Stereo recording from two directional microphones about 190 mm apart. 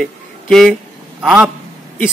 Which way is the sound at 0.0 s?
Centre (ahead or behind).